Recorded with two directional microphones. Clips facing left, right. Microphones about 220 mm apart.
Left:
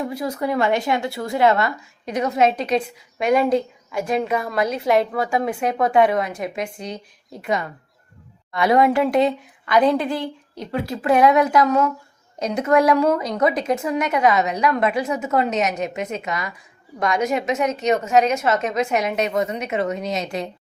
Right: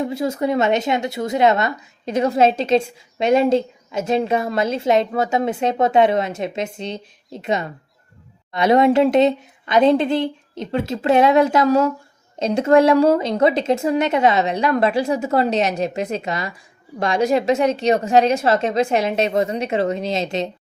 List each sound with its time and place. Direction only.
0.0 s a woman's voice: 25° right (ahead or behind)